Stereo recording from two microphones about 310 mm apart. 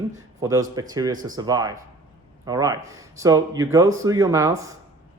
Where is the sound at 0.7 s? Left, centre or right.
Centre.